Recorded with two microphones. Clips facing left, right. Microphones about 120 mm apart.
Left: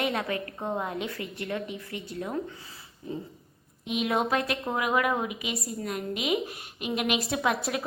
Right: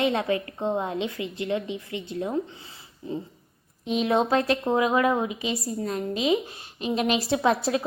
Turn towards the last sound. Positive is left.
turn(degrees=-30)  # may be behind; listen again after turning